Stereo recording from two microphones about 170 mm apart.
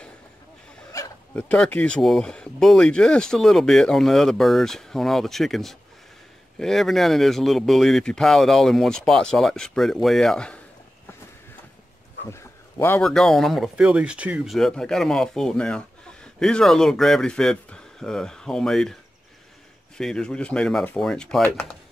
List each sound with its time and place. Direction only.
0.9 s speech: 10° left (ahead or behind)
12.3 s a sound: 15° left (ahead or behind)
13.0 s speech: centre (ahead or behind)
20.0 s speech: 5° left (ahead or behind)